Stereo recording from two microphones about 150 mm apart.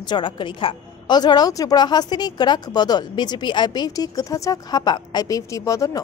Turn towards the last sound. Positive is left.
turn(degrees=20)  # may be behind; listen again after turning